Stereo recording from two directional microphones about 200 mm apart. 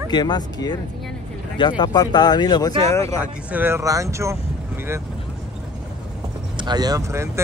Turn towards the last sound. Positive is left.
turn(degrees=-15)  # may be behind; listen again after turning